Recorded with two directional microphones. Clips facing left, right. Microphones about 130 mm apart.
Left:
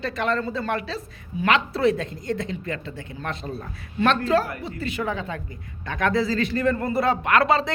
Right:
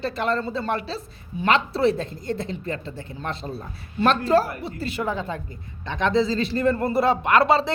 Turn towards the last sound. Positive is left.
turn(degrees=-30)  # may be behind; listen again after turning